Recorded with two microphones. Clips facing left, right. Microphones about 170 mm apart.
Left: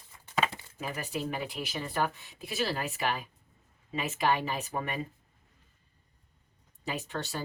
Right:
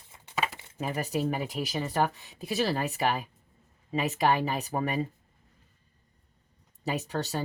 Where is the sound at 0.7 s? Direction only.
40° right (ahead or behind).